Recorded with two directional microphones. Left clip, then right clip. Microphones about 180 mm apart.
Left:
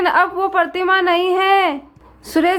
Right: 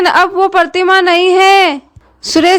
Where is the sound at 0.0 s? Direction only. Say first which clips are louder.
Right 6 dB; 45° right (ahead or behind).